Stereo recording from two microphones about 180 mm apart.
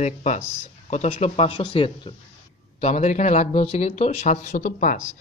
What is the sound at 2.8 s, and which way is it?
Speech, 40° left (ahead or behind).